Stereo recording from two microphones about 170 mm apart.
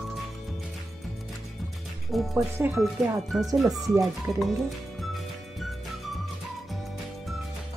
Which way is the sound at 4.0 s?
Centre (ahead or behind).